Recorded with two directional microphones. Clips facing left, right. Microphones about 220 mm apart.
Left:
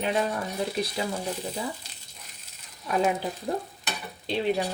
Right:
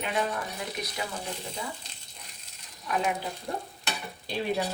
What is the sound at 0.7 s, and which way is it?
Speech, 25° left (ahead or behind).